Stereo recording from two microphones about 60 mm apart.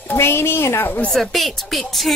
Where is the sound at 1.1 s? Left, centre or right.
Centre.